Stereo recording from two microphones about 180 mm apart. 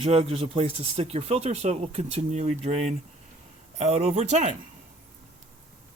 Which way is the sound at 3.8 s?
35° right (ahead or behind).